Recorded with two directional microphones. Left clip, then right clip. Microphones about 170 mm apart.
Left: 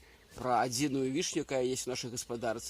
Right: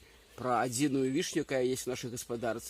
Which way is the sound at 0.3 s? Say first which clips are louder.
Left 1 dB; 25° right (ahead or behind).